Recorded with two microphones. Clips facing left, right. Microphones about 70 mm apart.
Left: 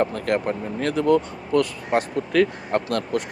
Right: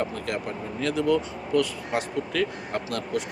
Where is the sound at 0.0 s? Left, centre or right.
Left.